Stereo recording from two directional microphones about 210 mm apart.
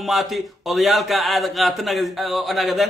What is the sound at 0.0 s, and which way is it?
A man's voice, centre (ahead or behind).